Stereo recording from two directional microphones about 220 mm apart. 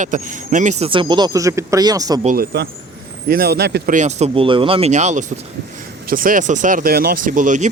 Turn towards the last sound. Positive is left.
turn(degrees=-35)  # may be behind; listen again after turning